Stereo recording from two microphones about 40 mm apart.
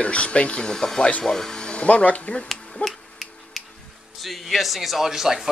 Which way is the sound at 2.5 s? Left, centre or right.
Centre.